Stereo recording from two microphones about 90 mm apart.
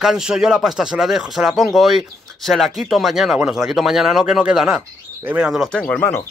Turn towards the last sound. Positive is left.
turn(degrees=25)  # may be behind; listen again after turning